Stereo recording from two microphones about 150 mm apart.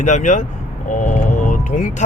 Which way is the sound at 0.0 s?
55° left (ahead or behind).